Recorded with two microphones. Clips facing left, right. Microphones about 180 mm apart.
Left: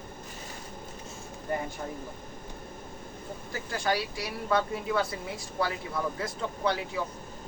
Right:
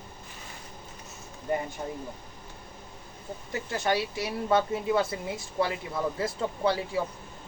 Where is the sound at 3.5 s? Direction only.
25° right (ahead or behind).